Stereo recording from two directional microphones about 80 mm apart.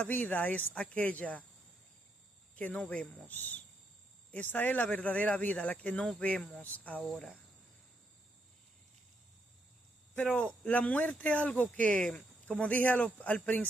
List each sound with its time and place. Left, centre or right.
0.0 s speech: left
2.5 s speech: centre
10.3 s speech: centre